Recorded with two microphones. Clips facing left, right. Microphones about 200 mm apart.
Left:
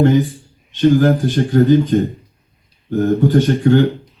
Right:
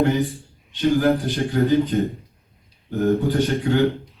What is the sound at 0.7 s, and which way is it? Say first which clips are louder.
Speech: left 5 dB; 45° left (ahead or behind).